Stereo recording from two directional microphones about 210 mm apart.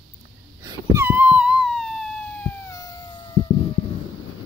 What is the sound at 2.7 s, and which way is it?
Cat, 15° left (ahead or behind).